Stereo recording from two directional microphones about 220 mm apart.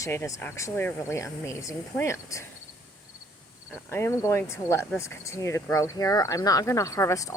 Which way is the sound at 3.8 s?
10° left (ahead or behind).